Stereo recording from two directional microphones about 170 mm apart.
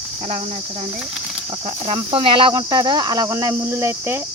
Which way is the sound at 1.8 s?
30° right (ahead or behind).